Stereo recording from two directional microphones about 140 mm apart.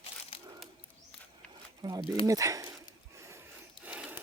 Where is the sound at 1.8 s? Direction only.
30° right (ahead or behind).